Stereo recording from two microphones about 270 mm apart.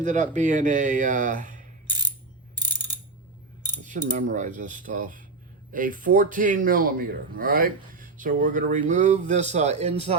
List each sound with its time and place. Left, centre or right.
0.0 s a man's voice: right
2.6 s pulleys: centre
4.1 s a man's voice: right